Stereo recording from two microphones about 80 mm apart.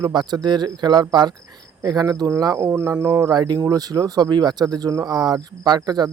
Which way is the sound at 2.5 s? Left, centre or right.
Right.